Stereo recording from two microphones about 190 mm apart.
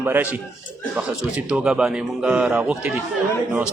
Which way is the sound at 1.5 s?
5° right (ahead or behind).